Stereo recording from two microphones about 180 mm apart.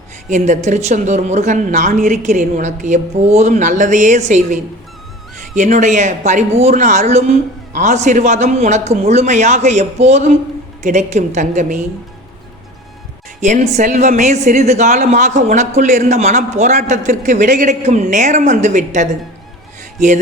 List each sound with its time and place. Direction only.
0.3 s speech: 40° right (ahead or behind)
13.4 s speech: 40° right (ahead or behind)